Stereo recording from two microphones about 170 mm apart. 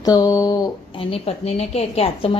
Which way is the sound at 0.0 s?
20° left (ahead or behind).